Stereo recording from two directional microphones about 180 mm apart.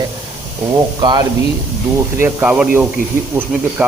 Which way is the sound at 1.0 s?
25° right (ahead or behind).